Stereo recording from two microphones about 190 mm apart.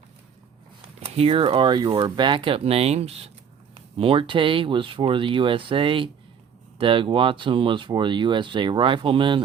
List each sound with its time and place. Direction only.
1.0 s speech: 30° right (ahead or behind)